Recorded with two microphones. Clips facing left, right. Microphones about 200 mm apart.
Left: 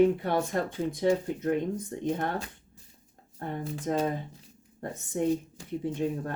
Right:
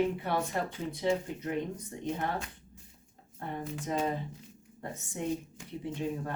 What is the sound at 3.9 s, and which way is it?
Speech, 50° left (ahead or behind).